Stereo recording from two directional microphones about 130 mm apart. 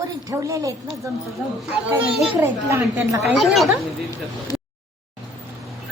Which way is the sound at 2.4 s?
20° right (ahead or behind).